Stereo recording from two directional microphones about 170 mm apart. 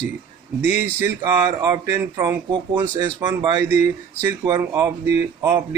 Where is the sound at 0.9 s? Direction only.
15° right (ahead or behind).